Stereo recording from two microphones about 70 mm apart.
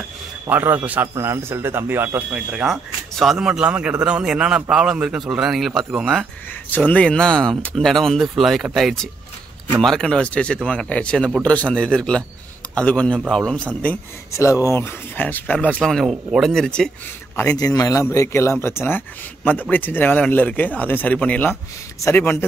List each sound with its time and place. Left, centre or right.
0.5 s a man's voice: right
1.0 s speech: right
2.6 s speech: centre
6.7 s speech: left
14.3 s speech: left
14.8 s speech: left
15.8 s speech: centre
17.6 s a man's voice: left
18.1 s speech: left